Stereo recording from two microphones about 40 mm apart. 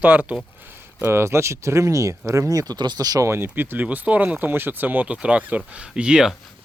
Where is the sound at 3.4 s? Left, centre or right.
Right.